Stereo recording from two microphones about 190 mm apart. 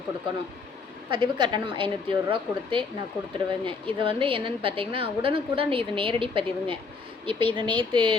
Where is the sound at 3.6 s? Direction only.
25° right (ahead or behind).